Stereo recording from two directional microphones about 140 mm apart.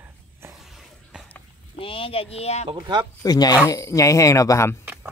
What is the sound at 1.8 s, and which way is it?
Speech, 40° left (ahead or behind).